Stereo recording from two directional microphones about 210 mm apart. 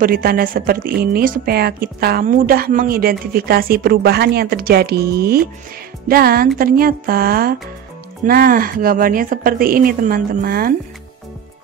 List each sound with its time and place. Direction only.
0.0 s a woman's voice: 45° right (ahead or behind)